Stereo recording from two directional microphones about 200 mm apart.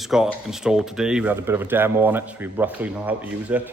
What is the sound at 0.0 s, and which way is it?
Speech, centre (ahead or behind).